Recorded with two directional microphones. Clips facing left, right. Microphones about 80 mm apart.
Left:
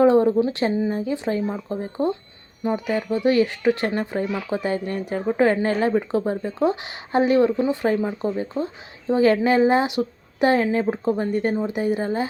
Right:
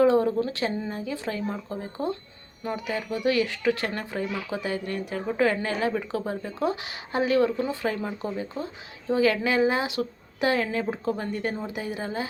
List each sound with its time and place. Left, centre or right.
0.0 s speech: left